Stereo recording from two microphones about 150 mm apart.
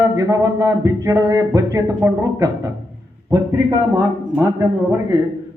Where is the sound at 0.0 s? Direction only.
20° right (ahead or behind).